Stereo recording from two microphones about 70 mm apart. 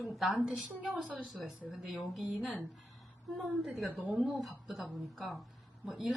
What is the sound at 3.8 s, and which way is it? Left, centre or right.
Speech, centre.